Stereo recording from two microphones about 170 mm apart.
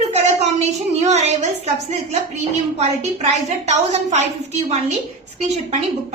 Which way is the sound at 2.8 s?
40° right (ahead or behind).